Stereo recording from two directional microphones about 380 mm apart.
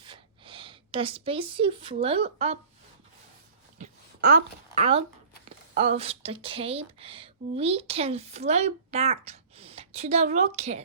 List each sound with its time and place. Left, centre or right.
0.0 s speech: centre
3.8 s a sound: right
5.5 s speech: centre